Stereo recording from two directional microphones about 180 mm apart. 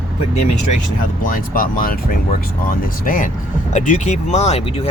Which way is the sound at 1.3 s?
50° left (ahead or behind).